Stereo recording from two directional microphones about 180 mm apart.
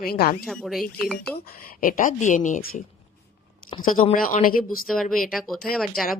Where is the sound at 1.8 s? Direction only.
45° left (ahead or behind).